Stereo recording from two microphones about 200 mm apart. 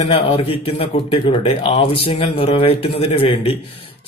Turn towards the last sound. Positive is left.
turn(degrees=30)  # may be behind; listen again after turning